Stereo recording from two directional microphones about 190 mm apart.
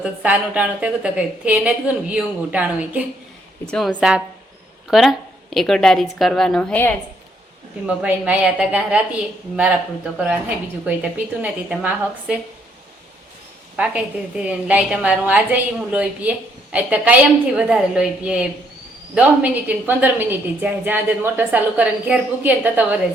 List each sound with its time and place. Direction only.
0.0 s a woman's voice: 5° right (ahead or behind)
7.9 s a woman's voice: 5° right (ahead or behind)
11.4 s a woman's voice: 5° right (ahead or behind)
13.7 s a woman's voice: 5° right (ahead or behind)